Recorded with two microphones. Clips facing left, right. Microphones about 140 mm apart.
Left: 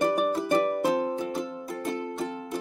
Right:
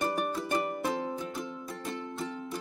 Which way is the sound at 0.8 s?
90° left.